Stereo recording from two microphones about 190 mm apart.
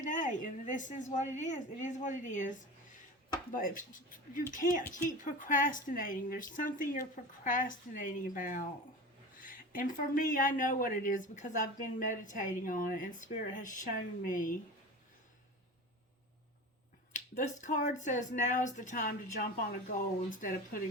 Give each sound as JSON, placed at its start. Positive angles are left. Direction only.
{"t": 0.0, "sound": "speech", "side_deg": 40}
{"t": 17.1, "sound": "speech", "side_deg": 40}